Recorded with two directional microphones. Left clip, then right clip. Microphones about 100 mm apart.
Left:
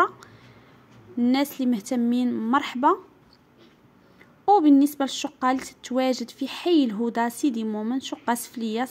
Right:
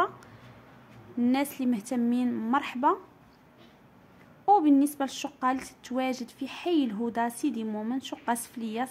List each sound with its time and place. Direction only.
1.3 s a woman's voice: 35° left (ahead or behind)
2.2 s speech: 20° left (ahead or behind)
2.5 s a woman's voice: 35° left (ahead or behind)
4.5 s a woman's voice: 40° left (ahead or behind)